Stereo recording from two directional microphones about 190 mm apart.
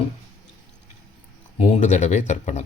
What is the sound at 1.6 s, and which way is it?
Speech, 40° left (ahead or behind).